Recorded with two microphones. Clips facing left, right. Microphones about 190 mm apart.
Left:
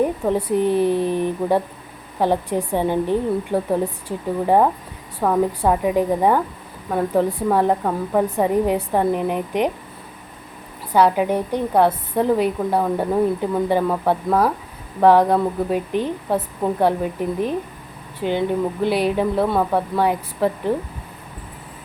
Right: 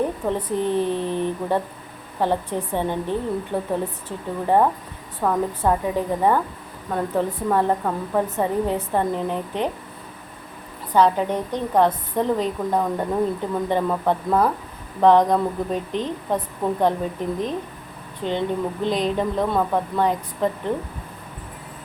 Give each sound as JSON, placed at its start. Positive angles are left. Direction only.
{"t": 0.3, "sound": "a woman's voice", "side_deg": 10}
{"t": 10.9, "sound": "a woman's voice", "side_deg": 10}